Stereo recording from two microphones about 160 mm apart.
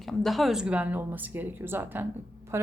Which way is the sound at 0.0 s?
Centre (ahead or behind).